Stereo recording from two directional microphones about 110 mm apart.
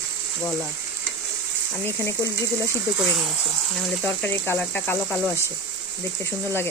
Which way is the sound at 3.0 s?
5° right (ahead or behind).